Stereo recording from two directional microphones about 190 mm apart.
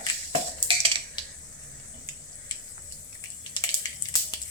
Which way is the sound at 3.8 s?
20° left (ahead or behind).